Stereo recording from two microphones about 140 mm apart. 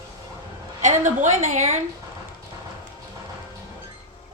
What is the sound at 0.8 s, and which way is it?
Speech, 60° right (ahead or behind).